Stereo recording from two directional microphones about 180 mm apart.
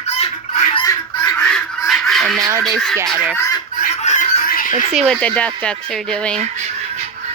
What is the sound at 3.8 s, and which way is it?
Chicken, 40° left (ahead or behind).